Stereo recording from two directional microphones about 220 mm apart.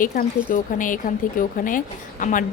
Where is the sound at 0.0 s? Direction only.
35° left (ahead or behind).